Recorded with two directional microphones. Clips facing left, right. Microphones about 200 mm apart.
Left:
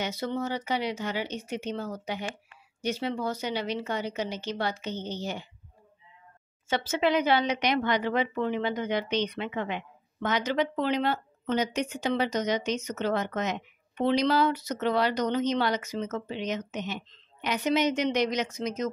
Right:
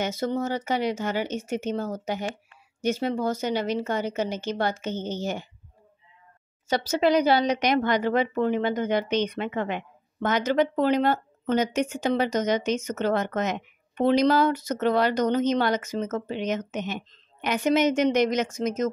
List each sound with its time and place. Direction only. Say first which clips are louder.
0.0 s speech: right 4 dB; 45° right (ahead or behind)
6.7 s speech: right 4 dB; 40° right (ahead or behind)